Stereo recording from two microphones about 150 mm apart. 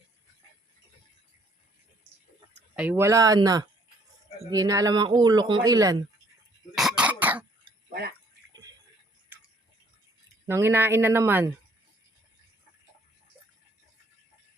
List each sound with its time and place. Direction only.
2.7 s a man's voice: 10° right (ahead or behind)
6.7 s cough: 5° right (ahead or behind)
7.9 s a sound: 90° right
9.3 s drip: 10° right (ahead or behind)
10.4 s speech: 15° right (ahead or behind)